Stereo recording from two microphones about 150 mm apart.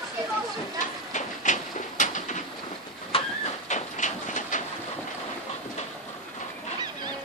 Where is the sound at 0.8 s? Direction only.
55° left (ahead or behind).